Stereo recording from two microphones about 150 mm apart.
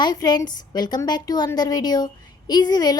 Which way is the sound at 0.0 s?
25° left (ahead or behind).